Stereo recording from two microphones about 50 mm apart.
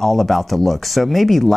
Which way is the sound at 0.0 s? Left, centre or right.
Centre.